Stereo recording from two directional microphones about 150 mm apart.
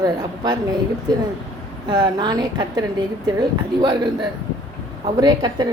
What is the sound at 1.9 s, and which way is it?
Speech, 30° right (ahead or behind).